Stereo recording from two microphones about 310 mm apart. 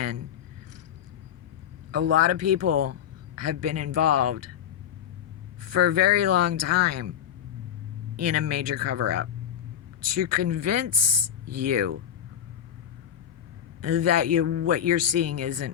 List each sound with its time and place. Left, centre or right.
1.9 s speech: right
5.6 s speech: right
8.1 s speech: right
13.8 s speech: right